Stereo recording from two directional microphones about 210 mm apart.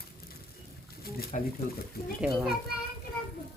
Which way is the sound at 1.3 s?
40° left (ahead or behind).